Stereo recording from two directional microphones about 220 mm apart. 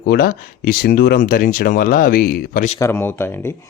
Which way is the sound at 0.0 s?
45° left (ahead or behind).